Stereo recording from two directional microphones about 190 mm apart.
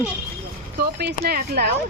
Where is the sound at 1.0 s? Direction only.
55° right (ahead or behind).